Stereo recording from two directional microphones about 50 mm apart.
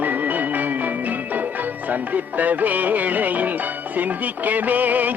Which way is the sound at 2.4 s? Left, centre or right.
Right.